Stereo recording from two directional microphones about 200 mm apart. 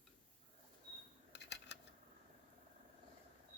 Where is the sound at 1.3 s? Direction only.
60° left (ahead or behind).